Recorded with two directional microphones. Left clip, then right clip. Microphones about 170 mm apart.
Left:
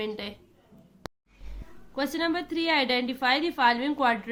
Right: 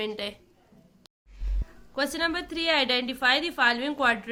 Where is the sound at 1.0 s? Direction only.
60° left (ahead or behind).